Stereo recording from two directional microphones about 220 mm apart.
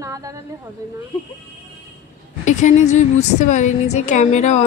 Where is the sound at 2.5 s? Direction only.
35° left (ahead or behind).